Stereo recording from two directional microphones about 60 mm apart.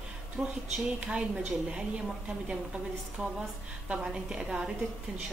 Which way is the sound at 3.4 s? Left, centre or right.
Centre.